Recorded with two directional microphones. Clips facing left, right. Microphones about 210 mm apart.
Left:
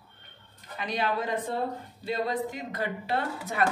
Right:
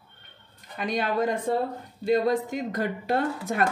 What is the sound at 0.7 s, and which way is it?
Speech, 50° right (ahead or behind).